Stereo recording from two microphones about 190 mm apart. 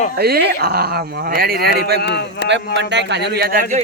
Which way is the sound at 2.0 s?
60° left (ahead or behind).